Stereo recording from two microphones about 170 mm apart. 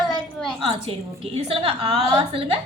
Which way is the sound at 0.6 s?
35° right (ahead or behind).